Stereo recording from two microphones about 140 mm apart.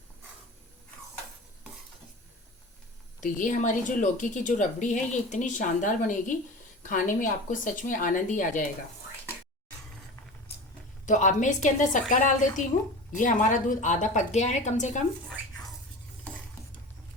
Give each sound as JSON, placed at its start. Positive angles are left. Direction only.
{"t": 3.2, "sound": "a woman's voice", "side_deg": 65}
{"t": 11.0, "sound": "a woman's voice", "side_deg": 65}